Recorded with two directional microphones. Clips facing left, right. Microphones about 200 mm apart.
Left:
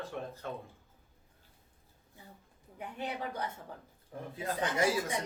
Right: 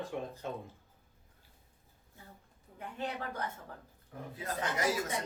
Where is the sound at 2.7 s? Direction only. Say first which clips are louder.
Even; 15° left (ahead or behind).